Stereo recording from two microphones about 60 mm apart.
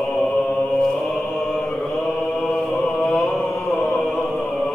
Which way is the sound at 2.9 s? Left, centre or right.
Centre.